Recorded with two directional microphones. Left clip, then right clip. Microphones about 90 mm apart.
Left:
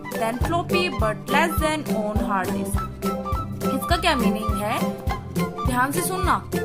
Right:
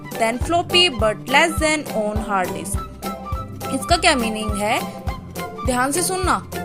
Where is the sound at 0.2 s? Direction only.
35° right (ahead or behind).